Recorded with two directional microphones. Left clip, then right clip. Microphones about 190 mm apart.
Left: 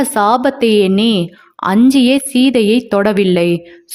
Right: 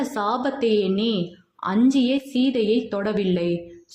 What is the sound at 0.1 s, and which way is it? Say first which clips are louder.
A woman's voice: left 12 dB; 40° left (ahead or behind).